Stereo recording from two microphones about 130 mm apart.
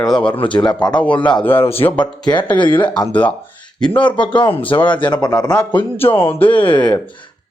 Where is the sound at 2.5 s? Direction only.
40° left (ahead or behind).